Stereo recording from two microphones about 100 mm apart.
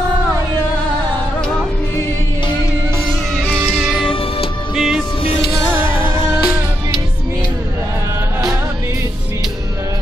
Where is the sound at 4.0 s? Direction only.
65° left (ahead or behind).